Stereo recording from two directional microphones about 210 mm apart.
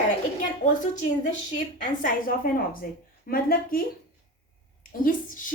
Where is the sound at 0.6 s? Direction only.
40° left (ahead or behind).